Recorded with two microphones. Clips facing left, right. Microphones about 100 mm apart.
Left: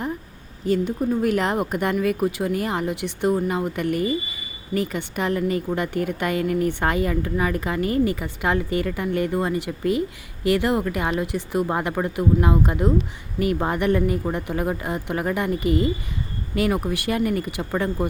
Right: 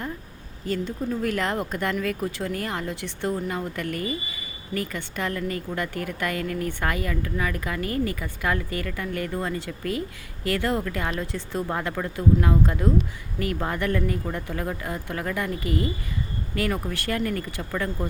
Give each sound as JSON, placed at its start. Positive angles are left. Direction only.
{"t": 0.6, "sound": "speech", "side_deg": 15}